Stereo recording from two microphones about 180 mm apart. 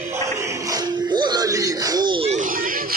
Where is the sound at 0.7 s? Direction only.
25° right (ahead or behind).